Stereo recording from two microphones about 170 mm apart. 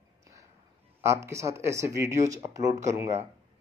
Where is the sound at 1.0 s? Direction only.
15° right (ahead or behind).